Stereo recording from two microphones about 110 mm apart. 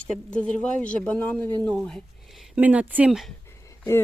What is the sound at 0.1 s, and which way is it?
Speech, 10° left (ahead or behind).